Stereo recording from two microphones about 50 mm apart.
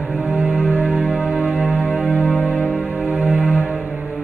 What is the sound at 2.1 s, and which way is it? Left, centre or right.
Music, right.